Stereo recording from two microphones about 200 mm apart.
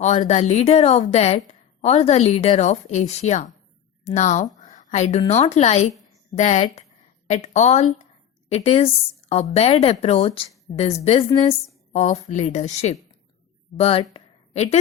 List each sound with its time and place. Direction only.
0.0 s a woman's voice: 35° left (ahead or behind)
11.9 s a woman's voice: 35° left (ahead or behind)